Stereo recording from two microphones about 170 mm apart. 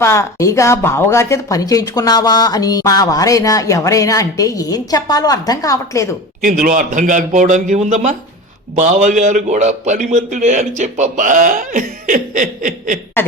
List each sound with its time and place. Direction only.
0.0 s speech: 15° left (ahead or behind)
6.4 s a man's voice: 50° right (ahead or behind)